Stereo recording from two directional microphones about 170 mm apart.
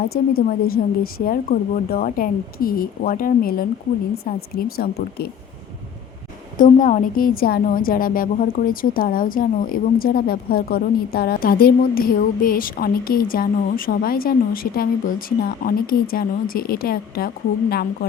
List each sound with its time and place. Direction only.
0.0 s a woman's voice: 65° left (ahead or behind)
6.6 s a woman's voice: 50° left (ahead or behind)